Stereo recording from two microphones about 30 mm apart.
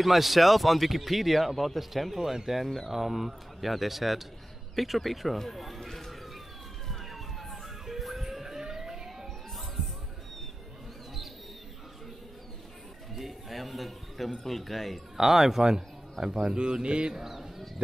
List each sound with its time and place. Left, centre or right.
0.0 s speech: centre
2.1 s speech: centre
5.9 s a sound: centre
6.9 s emergency vehicle: centre
13.1 s a sound: centre
15.1 s speech: centre; by 17.1 s right
17.1 s speech: centre